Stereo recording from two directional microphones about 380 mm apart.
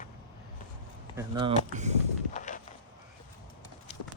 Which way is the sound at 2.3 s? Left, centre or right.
Centre.